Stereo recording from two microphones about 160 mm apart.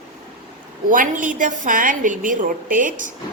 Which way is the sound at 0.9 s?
55° right (ahead or behind).